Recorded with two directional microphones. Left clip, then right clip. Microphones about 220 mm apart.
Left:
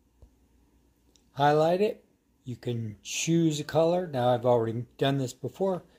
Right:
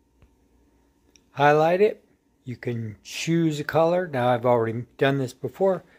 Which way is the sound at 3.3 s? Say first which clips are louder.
Right 3 dB; 10° right (ahead or behind).